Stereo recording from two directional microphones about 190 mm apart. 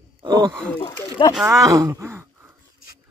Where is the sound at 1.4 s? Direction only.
15° right (ahead or behind).